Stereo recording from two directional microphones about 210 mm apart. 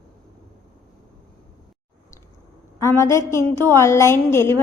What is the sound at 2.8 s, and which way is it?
A woman's voice, 15° left (ahead or behind).